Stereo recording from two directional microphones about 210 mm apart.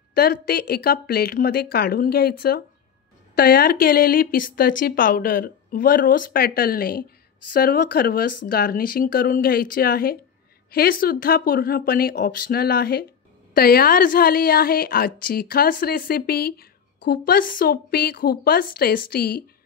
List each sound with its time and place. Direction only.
0.1 s a woman's voice: 50° left (ahead or behind)